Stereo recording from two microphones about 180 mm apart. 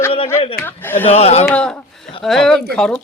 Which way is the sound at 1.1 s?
35° left (ahead or behind).